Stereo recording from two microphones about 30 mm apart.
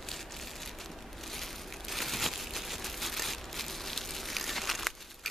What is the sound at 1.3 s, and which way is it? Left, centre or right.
Crumpling, centre.